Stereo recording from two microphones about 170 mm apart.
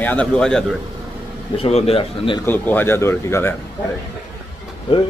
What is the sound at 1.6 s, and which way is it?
Speech, 35° left (ahead or behind).